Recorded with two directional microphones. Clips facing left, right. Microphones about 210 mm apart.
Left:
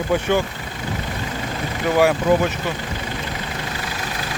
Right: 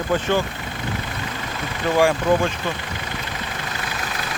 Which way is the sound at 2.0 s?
5° left (ahead or behind).